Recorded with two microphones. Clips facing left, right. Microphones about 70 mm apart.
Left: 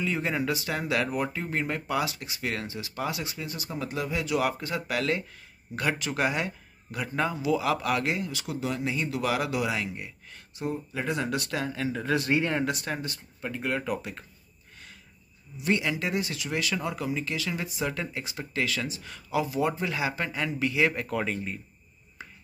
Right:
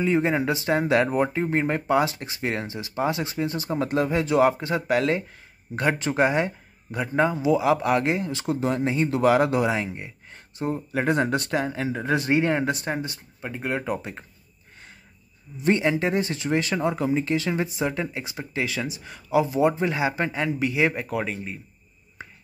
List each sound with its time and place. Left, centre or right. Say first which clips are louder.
0.0 s speech: right 7 dB; right
10.9 s speech: right 11 dB; right
11.2 s speech: right 5 dB; right
15.6 s speech: right 6 dB; right; by 21.5 s centre
22.2 s finger snapping: right 3 dB; right